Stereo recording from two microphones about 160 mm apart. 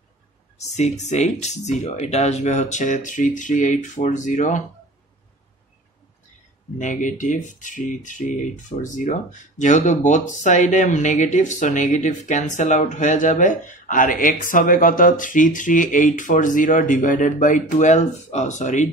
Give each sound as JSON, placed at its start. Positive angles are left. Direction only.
{"t": 0.7, "sound": "speech", "side_deg": 45}
{"t": 6.8, "sound": "speech", "side_deg": 55}